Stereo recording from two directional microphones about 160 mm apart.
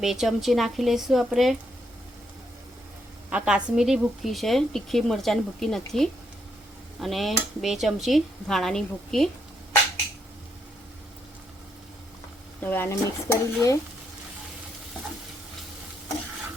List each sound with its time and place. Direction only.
0.0 s a woman's voice: centre (ahead or behind)
3.2 s a woman's voice: 5° right (ahead or behind)
12.6 s speech: 15° left (ahead or behind)